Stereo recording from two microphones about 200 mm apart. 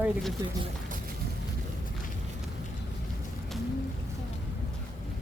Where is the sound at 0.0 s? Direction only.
Centre (ahead or behind).